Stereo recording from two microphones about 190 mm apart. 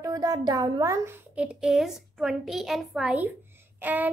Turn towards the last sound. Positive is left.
turn(degrees=-10)  # may be behind; listen again after turning